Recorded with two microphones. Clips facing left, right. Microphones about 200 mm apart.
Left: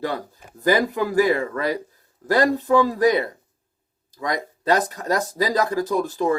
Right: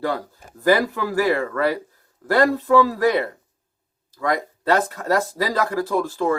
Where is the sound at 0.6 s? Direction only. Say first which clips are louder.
Right 1 dB; 20° left (ahead or behind).